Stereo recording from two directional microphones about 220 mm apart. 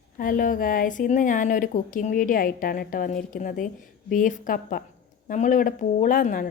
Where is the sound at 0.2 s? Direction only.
40° left (ahead or behind).